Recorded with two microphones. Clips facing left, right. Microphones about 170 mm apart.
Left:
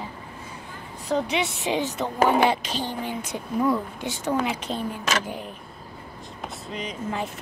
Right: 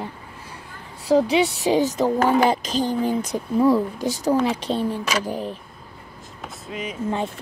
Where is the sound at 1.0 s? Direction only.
35° right (ahead or behind).